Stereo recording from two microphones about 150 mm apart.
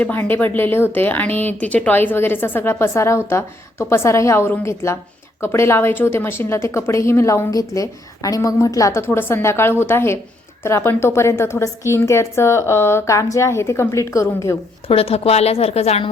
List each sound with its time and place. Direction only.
0.0 s a woman's voice: 15° left (ahead or behind)
14.8 s a woman's voice: 40° left (ahead or behind)